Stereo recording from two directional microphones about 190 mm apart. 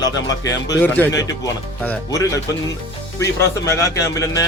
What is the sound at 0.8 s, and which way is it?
Speech, 10° left (ahead or behind).